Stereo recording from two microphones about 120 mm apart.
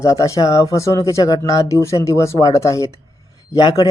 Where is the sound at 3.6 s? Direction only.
35° left (ahead or behind).